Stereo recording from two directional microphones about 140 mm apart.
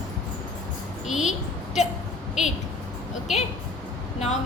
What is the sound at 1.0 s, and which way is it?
Speech, 5° right (ahead or behind).